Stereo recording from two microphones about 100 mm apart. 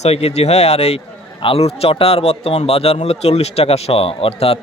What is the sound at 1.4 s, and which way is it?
Speech, 80° left.